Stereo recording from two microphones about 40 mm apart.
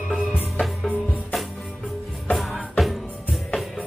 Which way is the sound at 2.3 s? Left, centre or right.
Centre.